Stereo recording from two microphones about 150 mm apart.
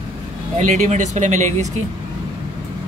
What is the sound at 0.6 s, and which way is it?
Speech, 50° right (ahead or behind).